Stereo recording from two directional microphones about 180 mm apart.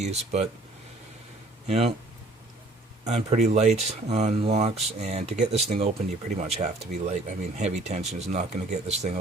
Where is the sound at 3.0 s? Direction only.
40° right (ahead or behind).